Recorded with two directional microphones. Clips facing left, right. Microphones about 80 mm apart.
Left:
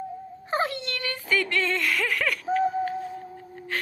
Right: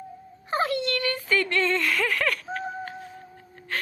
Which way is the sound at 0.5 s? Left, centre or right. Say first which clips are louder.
Right 2 dB; left.